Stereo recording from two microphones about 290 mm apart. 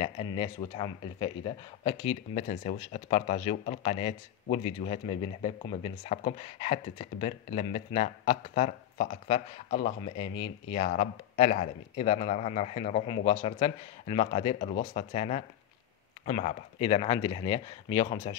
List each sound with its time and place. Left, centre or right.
0.0 s speech: centre